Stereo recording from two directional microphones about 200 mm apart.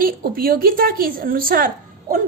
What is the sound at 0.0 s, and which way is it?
A woman's voice, 45° right (ahead or behind).